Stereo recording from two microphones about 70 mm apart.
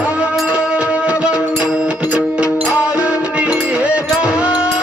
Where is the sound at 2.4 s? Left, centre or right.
Left.